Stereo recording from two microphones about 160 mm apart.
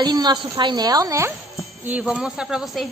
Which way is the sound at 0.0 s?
25° right (ahead or behind).